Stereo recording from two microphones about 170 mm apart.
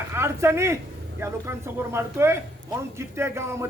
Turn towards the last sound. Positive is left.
turn(degrees=-15)  # may be behind; listen again after turning